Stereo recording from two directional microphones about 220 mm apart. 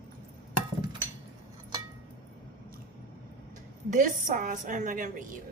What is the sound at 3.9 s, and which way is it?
A woman's voice, 35° right (ahead or behind).